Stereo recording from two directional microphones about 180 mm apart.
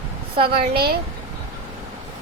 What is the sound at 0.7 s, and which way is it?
Speech, 60° right (ahead or behind).